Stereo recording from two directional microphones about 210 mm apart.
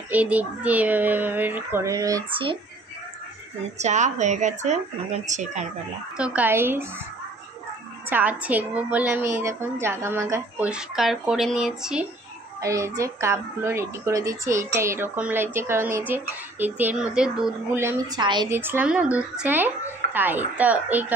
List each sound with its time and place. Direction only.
0.1 s speech: 5° right (ahead or behind)
3.7 s speech: 35° right (ahead or behind)
6.1 s speech: 5° right (ahead or behind)
8.1 s speech: 5° right (ahead or behind)
12.5 s speech: 15° right (ahead or behind)
18.5 s speech: 10° right (ahead or behind)